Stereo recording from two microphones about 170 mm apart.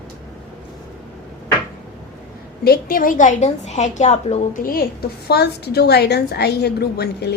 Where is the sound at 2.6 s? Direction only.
60° left (ahead or behind).